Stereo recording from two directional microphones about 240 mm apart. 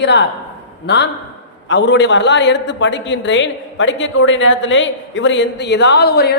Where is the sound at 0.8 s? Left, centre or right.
Left.